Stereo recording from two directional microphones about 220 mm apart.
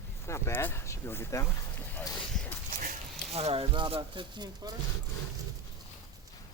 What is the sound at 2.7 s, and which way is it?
Speech, 35° right (ahead or behind).